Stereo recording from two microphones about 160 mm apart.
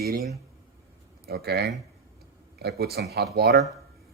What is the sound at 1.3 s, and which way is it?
Speech, 90° right.